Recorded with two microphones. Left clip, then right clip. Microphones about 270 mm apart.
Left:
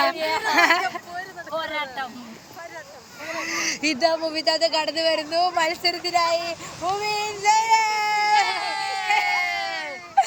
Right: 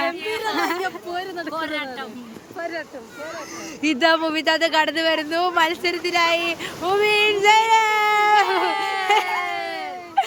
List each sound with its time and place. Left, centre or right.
0.2 s a sound: centre
1.5 s speech: centre
3.6 s speech: centre
8.4 s baby cry: right
10.2 s baby cry: centre